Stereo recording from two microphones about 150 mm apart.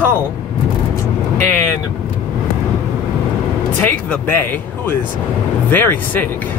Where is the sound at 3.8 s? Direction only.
15° left (ahead or behind).